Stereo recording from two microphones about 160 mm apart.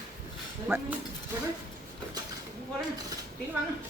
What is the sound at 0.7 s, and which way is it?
Speech, 10° right (ahead or behind).